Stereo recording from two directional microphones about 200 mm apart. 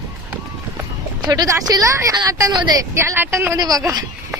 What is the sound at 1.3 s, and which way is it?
A woman's voice, 20° right (ahead or behind).